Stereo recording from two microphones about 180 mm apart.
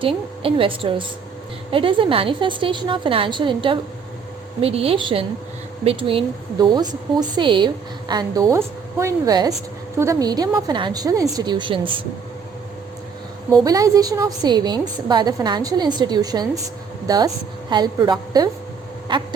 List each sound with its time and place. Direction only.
0.0 s a woman's voice: 30° right (ahead or behind)
13.7 s a woman's voice: 20° right (ahead or behind)